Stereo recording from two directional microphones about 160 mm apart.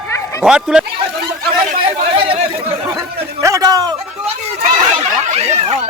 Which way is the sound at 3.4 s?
20° right (ahead or behind).